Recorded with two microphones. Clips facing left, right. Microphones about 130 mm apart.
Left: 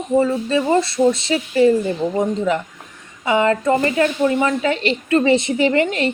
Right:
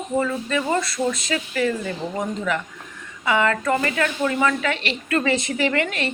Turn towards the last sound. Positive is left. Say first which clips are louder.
# left 6 dB
turn(degrees=25)  # may be behind; listen again after turning